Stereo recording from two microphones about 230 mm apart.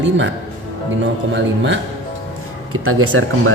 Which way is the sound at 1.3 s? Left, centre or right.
Right.